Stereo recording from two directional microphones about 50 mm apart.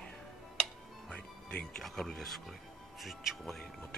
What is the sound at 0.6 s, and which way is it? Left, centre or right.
Music, left.